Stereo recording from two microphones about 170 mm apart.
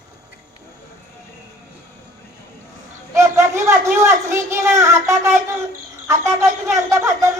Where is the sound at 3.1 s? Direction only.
15° right (ahead or behind).